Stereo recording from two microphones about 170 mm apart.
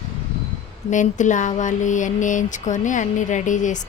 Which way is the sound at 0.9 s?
45° left (ahead or behind).